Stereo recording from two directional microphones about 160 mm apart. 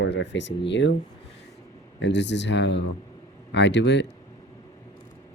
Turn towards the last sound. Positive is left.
turn(degrees=90)